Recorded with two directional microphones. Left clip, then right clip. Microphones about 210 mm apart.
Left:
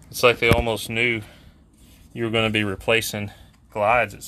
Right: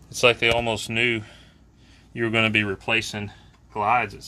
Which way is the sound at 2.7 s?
40° left (ahead or behind).